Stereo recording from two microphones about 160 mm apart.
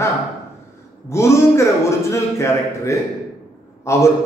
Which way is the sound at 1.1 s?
15° left (ahead or behind).